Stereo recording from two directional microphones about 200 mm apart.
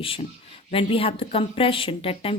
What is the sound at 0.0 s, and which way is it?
Speech, 25° left (ahead or behind).